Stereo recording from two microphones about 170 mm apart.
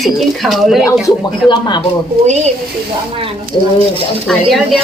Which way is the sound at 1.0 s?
25° left (ahead or behind).